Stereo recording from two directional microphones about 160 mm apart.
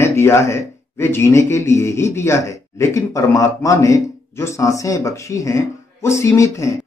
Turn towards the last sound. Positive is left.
turn(degrees=20)  # may be behind; listen again after turning